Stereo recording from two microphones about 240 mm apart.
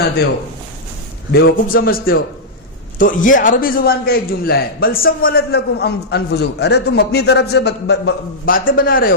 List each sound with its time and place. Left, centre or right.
1.3 s a man's voice: left
1.6 s a man's voice: left